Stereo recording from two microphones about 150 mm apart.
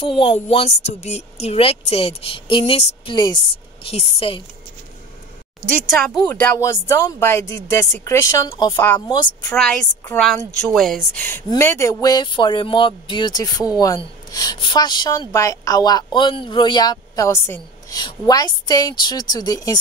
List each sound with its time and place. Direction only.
0.0 s a woman's voice: 40° left (ahead or behind)
5.6 s a woman's voice: centre (ahead or behind); by 8.7 s 30° left (ahead or behind)
8.7 s a woman's voice: 15° left (ahead or behind)
9.6 s a woman's voice: 5° left (ahead or behind)
11.4 s a woman's voice: 20° left (ahead or behind)